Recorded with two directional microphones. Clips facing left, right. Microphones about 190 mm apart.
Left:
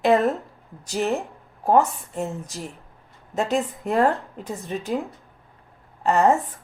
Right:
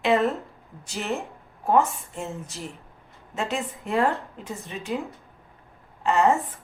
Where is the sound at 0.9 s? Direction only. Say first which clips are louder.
Left 6 dB; 35° left (ahead or behind).